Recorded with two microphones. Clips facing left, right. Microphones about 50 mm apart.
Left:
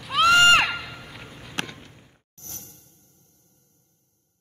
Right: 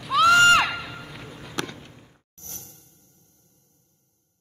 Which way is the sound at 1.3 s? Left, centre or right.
Centre.